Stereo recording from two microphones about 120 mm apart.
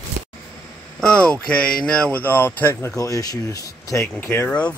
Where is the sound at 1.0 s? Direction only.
10° left (ahead or behind).